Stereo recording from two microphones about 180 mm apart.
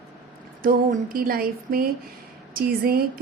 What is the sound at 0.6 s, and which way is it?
A woman's voice, 55° right (ahead or behind).